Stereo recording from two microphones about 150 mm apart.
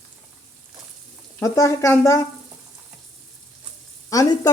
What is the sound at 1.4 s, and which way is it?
Speech, 20° left (ahead or behind).